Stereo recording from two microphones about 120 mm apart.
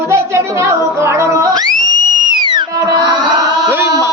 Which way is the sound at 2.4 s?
40° right (ahead or behind).